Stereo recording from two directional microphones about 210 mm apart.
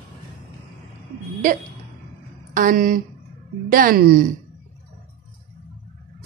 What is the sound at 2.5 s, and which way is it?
Speech, 40° right (ahead or behind).